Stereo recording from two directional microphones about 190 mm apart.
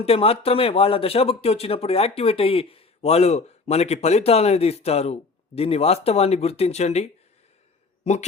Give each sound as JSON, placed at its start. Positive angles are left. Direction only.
{"t": 0.0, "sound": "speech", "side_deg": 30}